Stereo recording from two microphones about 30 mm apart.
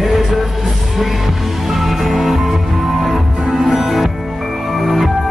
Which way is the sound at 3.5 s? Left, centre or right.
Centre.